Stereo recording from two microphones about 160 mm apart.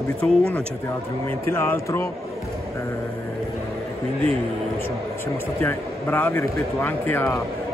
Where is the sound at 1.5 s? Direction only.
15° left (ahead or behind).